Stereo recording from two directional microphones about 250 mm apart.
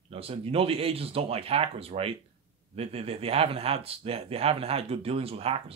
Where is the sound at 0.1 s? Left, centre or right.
Right.